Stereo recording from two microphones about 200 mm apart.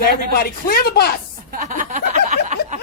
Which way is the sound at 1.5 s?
40° right (ahead or behind).